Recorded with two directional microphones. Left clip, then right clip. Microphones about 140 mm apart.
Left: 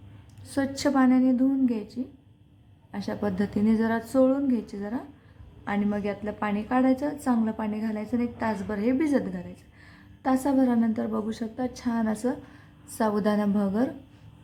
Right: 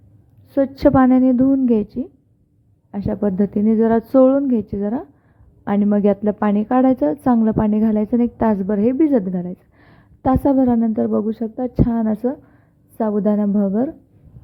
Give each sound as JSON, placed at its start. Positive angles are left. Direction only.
{"t": 0.5, "sound": "a woman's voice", "side_deg": -35}
{"t": 3.2, "sound": "a woman's voice", "side_deg": -30}